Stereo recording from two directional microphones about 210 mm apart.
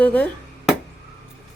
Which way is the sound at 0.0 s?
5° left (ahead or behind).